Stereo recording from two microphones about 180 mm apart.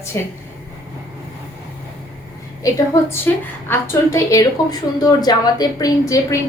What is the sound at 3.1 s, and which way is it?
A woman's voice, 15° left (ahead or behind).